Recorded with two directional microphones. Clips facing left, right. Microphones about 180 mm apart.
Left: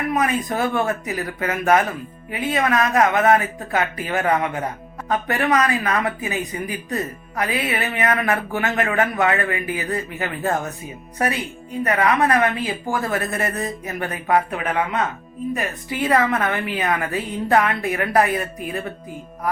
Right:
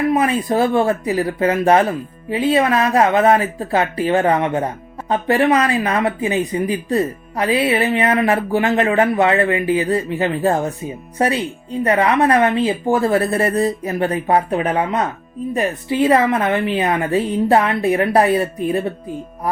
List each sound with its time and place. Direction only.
0.1 s a woman's voice: 30° right (ahead or behind)